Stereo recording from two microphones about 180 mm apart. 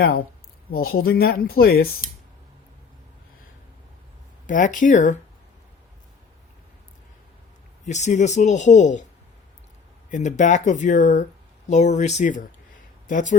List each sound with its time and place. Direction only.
0.0 s speech: 55° left (ahead or behind)
4.4 s speech: 45° left (ahead or behind)
7.9 s speech: 40° left (ahead or behind)
10.1 s speech: 45° left (ahead or behind)